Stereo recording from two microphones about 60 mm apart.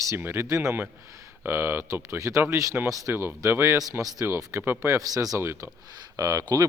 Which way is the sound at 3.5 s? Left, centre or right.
Right.